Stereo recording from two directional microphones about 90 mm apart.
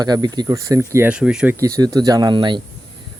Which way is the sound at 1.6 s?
40° right (ahead or behind).